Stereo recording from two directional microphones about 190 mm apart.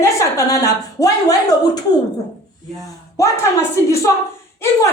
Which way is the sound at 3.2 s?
15° left (ahead or behind).